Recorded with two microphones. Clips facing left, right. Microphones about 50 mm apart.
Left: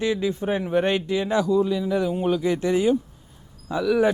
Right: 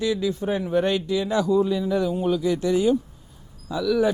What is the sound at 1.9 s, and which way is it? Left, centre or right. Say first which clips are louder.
Speech: even; centre.